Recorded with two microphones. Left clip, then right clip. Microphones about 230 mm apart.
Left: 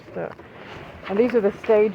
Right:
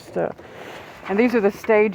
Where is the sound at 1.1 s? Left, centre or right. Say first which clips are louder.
Right 1 dB; right.